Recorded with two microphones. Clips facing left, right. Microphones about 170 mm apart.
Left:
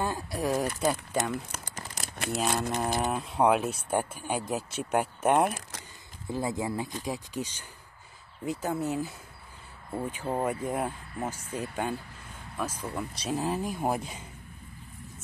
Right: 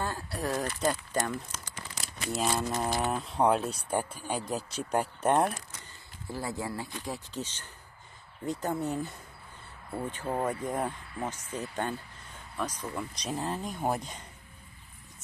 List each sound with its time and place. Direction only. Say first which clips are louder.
0.0 s speech: left 3 dB; 15° left (ahead or behind)
1.5 s crumpling: left 2 dB; 50° left (ahead or behind)
2.4 s speech: even; 60° left (ahead or behind)
2.7 s speech: left 1 dB; 15° left (ahead or behind)
3.1 s speech: left 2 dB; centre (ahead or behind)
6.3 s speech: left 4 dB; 20° left (ahead or behind)